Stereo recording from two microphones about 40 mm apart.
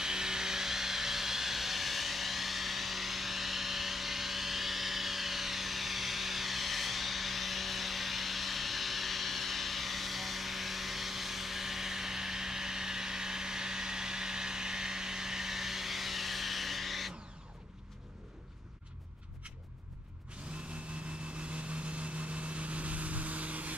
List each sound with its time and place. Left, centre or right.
0.0 s vehicle: centre
21.4 s vehicle: right